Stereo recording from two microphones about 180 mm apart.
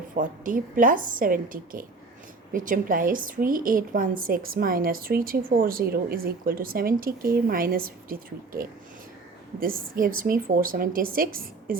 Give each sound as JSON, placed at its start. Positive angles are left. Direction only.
{"t": 0.2, "sound": "a woman's voice", "side_deg": -50}
{"t": 9.6, "sound": "a woman's voice", "side_deg": -50}